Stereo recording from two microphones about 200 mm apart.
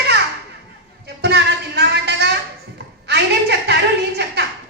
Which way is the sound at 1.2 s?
55° right (ahead or behind).